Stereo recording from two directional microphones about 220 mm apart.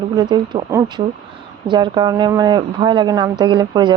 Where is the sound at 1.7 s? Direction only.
20° right (ahead or behind).